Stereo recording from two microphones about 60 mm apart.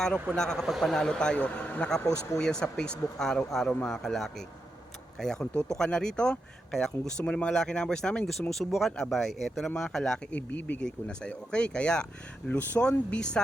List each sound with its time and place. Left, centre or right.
0.3 s speech: centre
0.7 s speech: centre; by 1.9 s left
2.4 s speech: centre
7.3 s speech: centre
10.3 s speech: left
10.8 s speech: centre
12.5 s speech: left
12.8 s speech: centre